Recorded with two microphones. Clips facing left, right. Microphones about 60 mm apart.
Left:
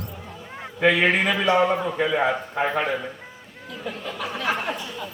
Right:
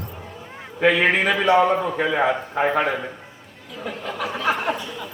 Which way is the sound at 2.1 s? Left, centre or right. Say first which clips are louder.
Right 2 dB; right.